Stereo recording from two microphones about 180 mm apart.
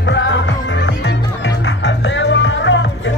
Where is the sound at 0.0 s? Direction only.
85° left.